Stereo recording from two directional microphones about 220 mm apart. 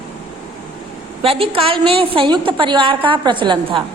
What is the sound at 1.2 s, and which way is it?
A woman's voice, 25° right (ahead or behind).